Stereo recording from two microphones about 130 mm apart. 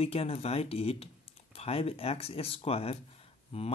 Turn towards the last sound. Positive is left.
turn(degrees=50)  # may be behind; listen again after turning